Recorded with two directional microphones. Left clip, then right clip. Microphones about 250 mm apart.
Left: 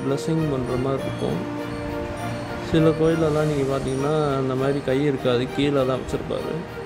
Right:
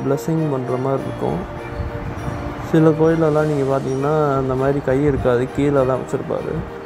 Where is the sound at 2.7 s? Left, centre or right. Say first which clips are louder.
Right 4 dB; centre.